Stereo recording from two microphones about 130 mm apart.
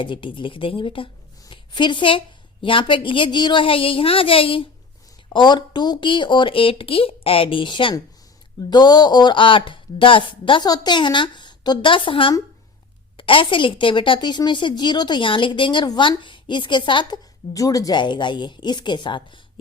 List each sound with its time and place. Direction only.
0.0 s a woman's voice: 40° left (ahead or behind)